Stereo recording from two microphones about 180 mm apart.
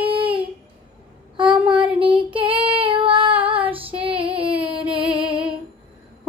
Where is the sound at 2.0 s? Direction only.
25° right (ahead or behind).